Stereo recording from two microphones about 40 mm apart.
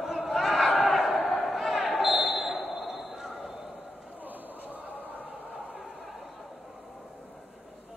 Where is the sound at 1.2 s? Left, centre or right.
Centre.